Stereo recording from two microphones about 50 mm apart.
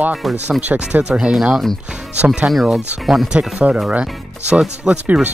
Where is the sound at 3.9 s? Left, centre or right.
Right.